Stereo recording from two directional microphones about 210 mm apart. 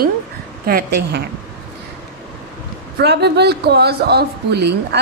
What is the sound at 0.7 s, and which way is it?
Speech, 50° right (ahead or behind).